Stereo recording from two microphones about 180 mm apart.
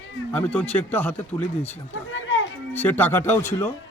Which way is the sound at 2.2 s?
90° left.